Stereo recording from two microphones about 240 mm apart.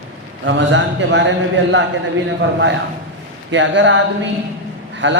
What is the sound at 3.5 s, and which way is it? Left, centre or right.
Speech, right.